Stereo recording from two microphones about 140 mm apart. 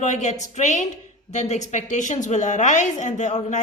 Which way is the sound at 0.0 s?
60° left (ahead or behind).